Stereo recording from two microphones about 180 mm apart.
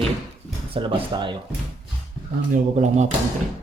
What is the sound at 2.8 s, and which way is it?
Speech, 40° right (ahead or behind).